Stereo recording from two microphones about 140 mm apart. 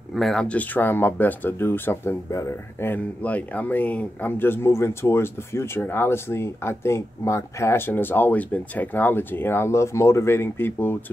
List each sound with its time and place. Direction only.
0.1 s speech: centre (ahead or behind)